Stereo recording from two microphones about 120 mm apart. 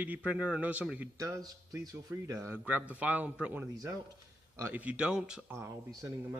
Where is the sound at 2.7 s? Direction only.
15° right (ahead or behind).